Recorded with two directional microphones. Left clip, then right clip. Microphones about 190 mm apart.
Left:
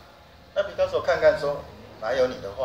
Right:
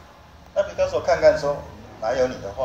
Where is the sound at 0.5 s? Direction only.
5° left (ahead or behind).